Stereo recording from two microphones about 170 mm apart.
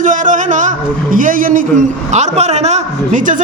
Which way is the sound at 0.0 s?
50° right (ahead or behind).